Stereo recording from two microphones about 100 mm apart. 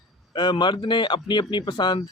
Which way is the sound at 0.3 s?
50° left (ahead or behind).